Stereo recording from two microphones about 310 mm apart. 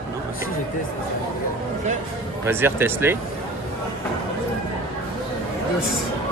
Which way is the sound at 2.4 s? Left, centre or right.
Centre.